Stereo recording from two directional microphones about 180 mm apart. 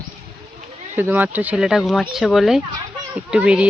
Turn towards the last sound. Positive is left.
turn(degrees=-5)  # may be behind; listen again after turning